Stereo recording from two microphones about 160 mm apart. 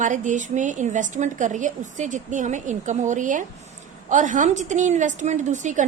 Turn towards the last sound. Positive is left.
turn(degrees=-50)  # may be behind; listen again after turning